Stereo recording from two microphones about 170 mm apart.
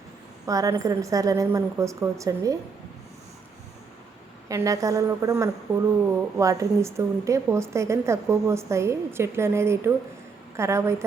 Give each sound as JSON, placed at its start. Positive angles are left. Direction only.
{"t": 0.4, "sound": "a woman's voice", "side_deg": -20}
{"t": 4.4, "sound": "a woman's voice", "side_deg": -20}